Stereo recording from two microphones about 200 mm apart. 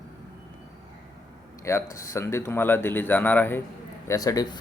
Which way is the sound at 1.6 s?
15° left (ahead or behind).